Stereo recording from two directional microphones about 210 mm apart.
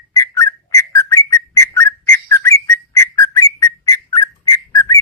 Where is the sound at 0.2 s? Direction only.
15° left (ahead or behind).